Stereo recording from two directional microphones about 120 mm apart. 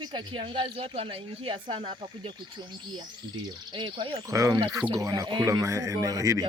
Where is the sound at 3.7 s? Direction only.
40° right (ahead or behind).